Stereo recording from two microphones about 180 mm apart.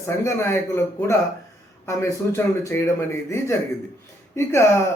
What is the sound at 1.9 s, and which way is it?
Speech, 15° left (ahead or behind).